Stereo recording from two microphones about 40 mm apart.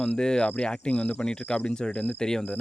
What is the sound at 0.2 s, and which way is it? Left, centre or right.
Speech, centre.